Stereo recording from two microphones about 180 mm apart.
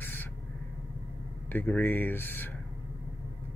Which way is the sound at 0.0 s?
10° left (ahead or behind).